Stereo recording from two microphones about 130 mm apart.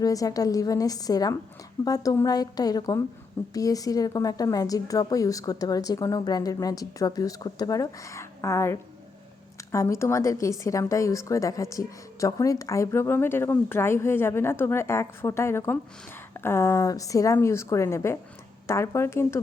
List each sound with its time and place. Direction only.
0.0 s a woman's voice: 25° left (ahead or behind)